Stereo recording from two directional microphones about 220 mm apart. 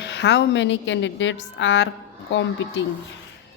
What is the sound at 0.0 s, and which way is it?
A woman's voice, 50° left (ahead or behind).